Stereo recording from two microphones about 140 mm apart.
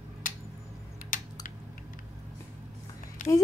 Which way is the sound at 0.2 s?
75° left (ahead or behind).